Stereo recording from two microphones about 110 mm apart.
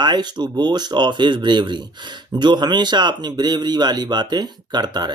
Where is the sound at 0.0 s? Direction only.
40° right (ahead or behind).